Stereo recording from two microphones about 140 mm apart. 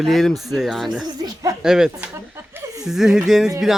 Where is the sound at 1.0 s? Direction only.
25° right (ahead or behind).